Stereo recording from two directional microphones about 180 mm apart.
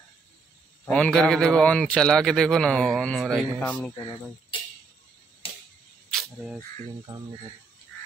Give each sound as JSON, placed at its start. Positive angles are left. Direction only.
{"t": 0.8, "sound": "a man's voice", "side_deg": 5}
{"t": 5.4, "sound": "a sound", "side_deg": 30}
{"t": 6.1, "sound": "speech", "side_deg": -5}